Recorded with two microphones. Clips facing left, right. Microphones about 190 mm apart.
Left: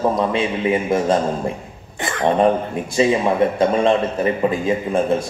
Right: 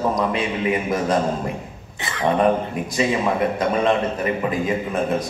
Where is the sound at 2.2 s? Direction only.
30° left (ahead or behind).